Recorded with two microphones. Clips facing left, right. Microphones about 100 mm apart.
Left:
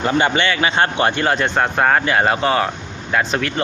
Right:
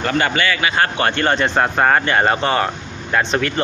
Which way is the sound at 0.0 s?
20° left (ahead or behind).